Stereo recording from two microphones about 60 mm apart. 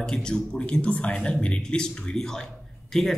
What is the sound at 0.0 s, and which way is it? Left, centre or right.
A man's voice, centre.